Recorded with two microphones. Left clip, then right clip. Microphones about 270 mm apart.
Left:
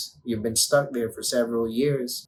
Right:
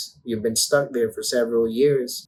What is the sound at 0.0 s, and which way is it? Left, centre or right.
Speech, centre.